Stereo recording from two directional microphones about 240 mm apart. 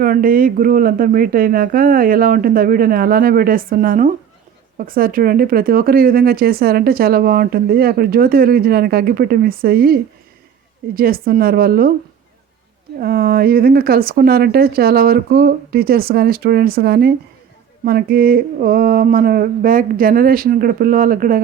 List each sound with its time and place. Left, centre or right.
0.0 s speech: right
13.0 s speech: right